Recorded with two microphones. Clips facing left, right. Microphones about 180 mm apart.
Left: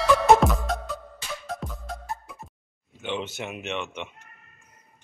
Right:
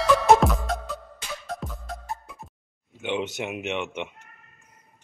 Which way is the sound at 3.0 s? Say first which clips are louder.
Right 3 dB; 20° right (ahead or behind).